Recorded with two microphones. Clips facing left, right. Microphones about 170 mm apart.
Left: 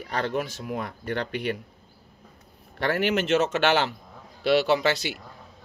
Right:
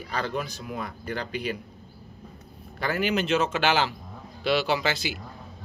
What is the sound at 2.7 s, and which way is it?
Speech, 70° left (ahead or behind).